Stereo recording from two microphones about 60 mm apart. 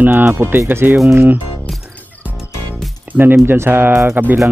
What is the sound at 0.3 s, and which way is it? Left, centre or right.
Speech, right.